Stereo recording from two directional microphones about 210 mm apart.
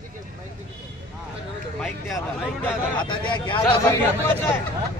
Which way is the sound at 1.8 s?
Centre (ahead or behind).